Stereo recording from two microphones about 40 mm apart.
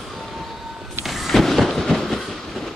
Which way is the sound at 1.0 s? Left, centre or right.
Centre.